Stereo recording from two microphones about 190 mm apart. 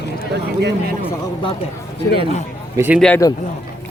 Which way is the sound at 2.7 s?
10° right (ahead or behind).